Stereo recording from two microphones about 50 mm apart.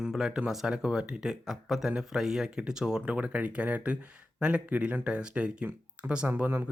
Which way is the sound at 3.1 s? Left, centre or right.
Right.